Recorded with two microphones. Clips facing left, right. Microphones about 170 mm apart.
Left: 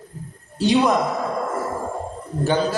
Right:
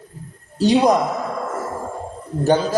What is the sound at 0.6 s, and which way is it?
Speech, 40° right (ahead or behind).